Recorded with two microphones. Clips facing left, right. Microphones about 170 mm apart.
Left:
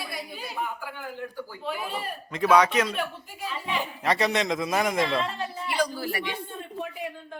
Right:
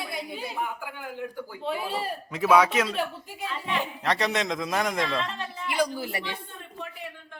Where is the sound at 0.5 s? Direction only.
10° right (ahead or behind).